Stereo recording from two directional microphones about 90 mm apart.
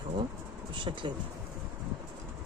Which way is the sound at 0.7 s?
65° right (ahead or behind).